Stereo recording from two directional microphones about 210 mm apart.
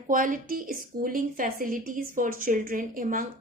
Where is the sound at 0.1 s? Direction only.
40° right (ahead or behind).